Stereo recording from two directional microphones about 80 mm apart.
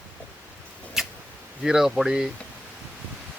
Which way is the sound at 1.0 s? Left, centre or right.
Centre.